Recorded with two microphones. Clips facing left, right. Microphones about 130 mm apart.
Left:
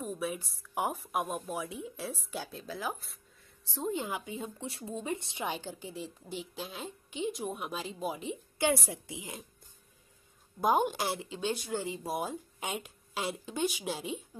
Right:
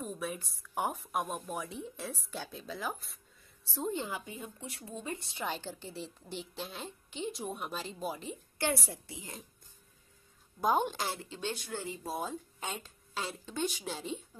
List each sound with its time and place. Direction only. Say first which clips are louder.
0.0 s a woman's voice: left 3 dB; 5° left (ahead or behind)
3.9 s a woman's voice: left 2 dB; 15° left (ahead or behind)
5.5 s a woman's voice: left 1 dB; 5° left (ahead or behind)
10.6 s speech: left 2 dB; 5° left (ahead or behind)